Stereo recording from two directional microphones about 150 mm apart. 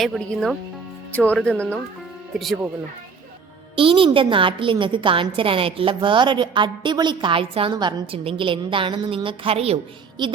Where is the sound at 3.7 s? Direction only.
35° right (ahead or behind).